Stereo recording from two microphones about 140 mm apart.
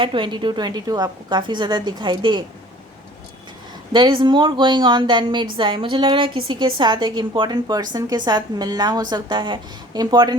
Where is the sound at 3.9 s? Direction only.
35° right (ahead or behind).